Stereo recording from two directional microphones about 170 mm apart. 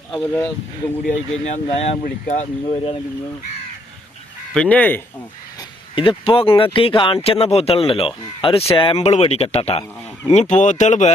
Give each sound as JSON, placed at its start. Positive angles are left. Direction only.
{"t": 0.1, "sound": "speech", "side_deg": 5}
{"t": 1.0, "sound": "speech", "side_deg": 45}
{"t": 4.5, "sound": "speech", "side_deg": 10}
{"t": 5.5, "sound": "speech", "side_deg": 30}